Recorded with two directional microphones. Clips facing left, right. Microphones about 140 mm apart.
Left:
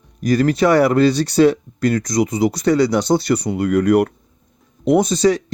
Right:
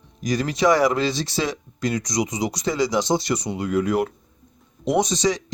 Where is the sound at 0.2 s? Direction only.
55° left (ahead or behind).